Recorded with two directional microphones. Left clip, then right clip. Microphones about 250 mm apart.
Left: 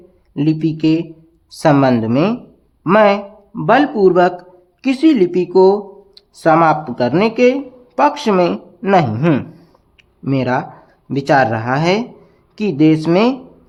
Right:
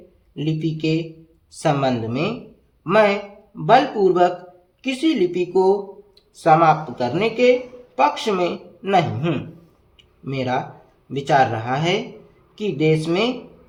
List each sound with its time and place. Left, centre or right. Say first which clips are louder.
0.3 s a man's voice: left 8 dB; left